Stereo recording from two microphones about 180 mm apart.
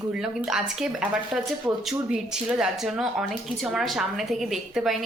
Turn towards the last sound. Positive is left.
turn(degrees=0)  # may be behind; listen again after turning